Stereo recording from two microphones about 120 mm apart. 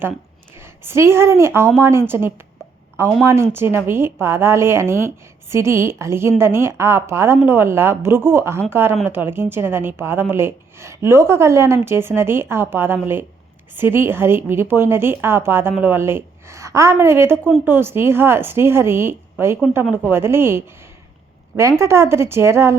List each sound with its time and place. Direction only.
0.6 s a woman's voice: 20° right (ahead or behind)